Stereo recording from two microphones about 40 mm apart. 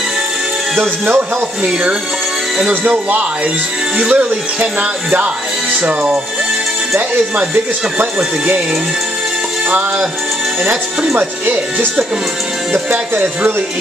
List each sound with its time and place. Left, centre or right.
2.9 s speech: right
5.8 s speech: right
9.7 s music: right
11.1 s speech: right